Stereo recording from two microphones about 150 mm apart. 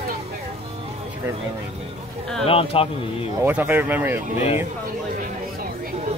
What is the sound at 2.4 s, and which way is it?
Speech, 40° left (ahead or behind).